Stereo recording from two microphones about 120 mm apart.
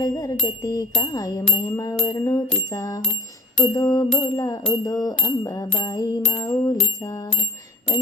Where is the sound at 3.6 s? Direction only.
35° left (ahead or behind).